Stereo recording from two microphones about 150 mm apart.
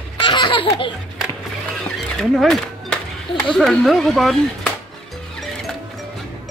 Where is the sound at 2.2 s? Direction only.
Centre (ahead or behind).